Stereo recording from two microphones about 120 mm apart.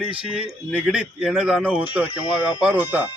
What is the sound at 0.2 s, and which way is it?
A man's voice, 5° right (ahead or behind).